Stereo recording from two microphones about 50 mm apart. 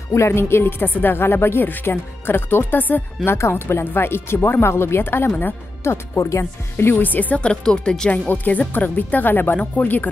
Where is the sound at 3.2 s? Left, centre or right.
Left.